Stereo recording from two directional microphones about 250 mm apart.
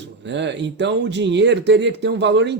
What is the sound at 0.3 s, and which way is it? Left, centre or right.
Speech, right.